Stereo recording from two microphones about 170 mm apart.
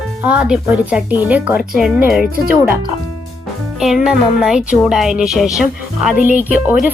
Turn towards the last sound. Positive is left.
turn(degrees=-10)  # may be behind; listen again after turning